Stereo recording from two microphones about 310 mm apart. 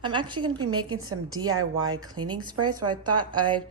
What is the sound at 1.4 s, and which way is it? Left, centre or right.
Speech, right.